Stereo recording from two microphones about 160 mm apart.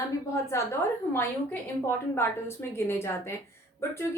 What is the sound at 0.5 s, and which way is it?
Speech, 15° left (ahead or behind).